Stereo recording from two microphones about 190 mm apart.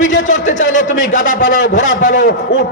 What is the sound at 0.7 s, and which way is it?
A man's voice, 45° left (ahead or behind).